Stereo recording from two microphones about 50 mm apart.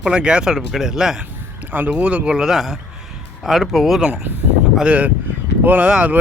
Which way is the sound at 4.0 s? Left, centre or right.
Centre.